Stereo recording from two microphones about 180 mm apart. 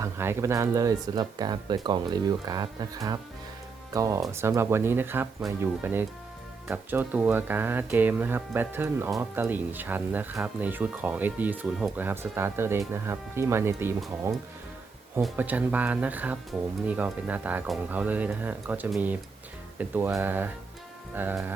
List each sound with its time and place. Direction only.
0.0 s speech: 15° right (ahead or behind)
15.2 s speech: 10° right (ahead or behind)